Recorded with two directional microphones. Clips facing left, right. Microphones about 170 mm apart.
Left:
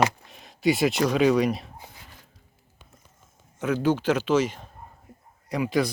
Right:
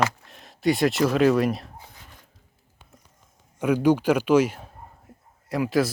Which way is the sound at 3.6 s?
10° right (ahead or behind).